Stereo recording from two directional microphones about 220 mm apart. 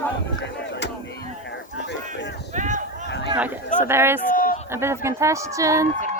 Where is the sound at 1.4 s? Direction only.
55° left (ahead or behind).